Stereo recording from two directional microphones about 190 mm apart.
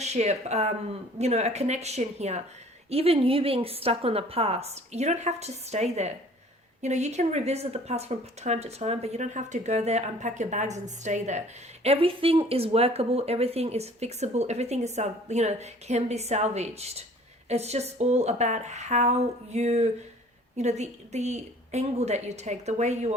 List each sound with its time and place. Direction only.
0.0 s speech: 35° right (ahead or behind)